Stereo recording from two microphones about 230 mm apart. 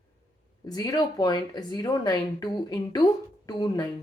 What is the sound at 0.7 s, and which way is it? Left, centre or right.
A woman's voice, centre.